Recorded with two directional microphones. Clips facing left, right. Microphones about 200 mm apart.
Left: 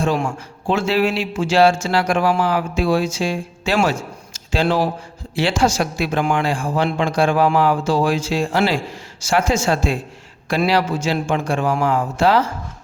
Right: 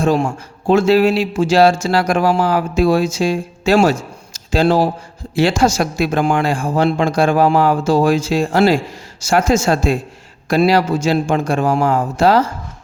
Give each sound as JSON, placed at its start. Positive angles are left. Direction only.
{"t": 0.3, "sound": "a man's voice", "side_deg": -40}